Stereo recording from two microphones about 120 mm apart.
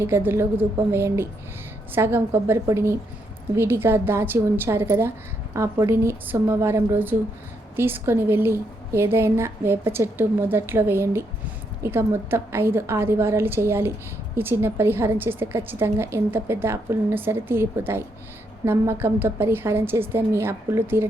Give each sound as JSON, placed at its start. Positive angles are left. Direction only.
{"t": 0.0, "sound": "a woman's voice", "side_deg": -20}